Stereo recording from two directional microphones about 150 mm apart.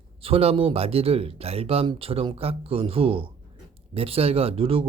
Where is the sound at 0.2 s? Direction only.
40° right (ahead or behind).